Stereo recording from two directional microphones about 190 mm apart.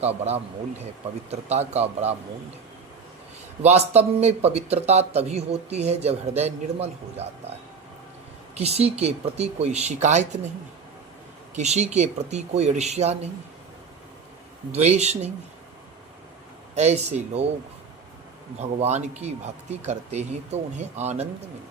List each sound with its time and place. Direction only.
0.0 s speech: 35° right (ahead or behind)
3.6 s speech: 35° right (ahead or behind)
8.5 s speech: 35° right (ahead or behind)
11.5 s speech: 35° right (ahead or behind)
14.7 s speech: 35° right (ahead or behind)
16.7 s speech: 35° right (ahead or behind)
18.8 s speech: 35° right (ahead or behind)